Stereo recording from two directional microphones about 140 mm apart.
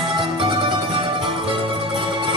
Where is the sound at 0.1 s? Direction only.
35° right (ahead or behind).